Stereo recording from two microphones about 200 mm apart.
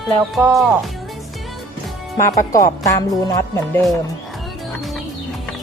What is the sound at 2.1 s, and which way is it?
Speech, 15° left (ahead or behind).